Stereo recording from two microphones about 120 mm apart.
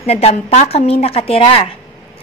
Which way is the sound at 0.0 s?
60° left (ahead or behind).